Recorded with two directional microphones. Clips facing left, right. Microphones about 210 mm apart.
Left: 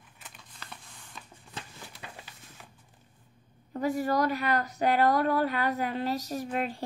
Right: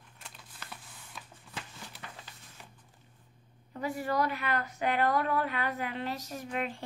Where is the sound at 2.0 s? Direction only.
15° left (ahead or behind).